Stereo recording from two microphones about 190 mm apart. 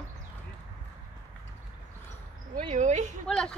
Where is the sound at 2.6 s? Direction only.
40° right (ahead or behind).